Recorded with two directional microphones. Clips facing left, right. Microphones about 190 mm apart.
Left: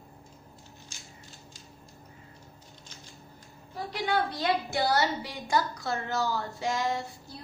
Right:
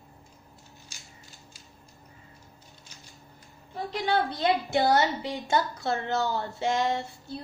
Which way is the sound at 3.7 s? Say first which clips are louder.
Right 2 dB; 20° right (ahead or behind).